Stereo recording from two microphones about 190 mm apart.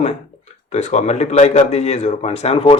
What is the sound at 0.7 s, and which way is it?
Speech, 40° left (ahead or behind).